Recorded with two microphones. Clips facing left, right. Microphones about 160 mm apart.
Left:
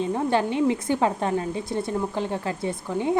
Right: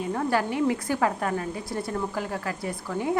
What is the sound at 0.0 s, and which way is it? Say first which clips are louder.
A woman's voice: left 3 dB; 20° left (ahead or behind).